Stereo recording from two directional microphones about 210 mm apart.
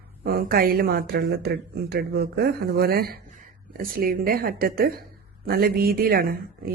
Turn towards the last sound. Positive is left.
turn(degrees=-45)  # may be behind; listen again after turning